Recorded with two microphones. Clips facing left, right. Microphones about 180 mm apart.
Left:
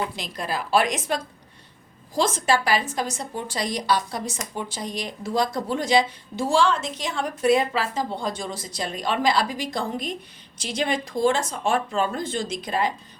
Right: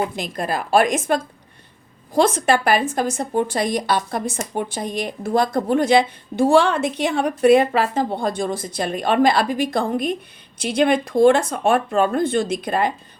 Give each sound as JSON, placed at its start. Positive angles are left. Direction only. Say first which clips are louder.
{"t": 0.0, "sound": "a woman's voice", "louder": "right 6 dB", "side_deg": -50}
{"t": 2.1, "sound": "a woman's voice", "louder": "right 5 dB", "side_deg": -60}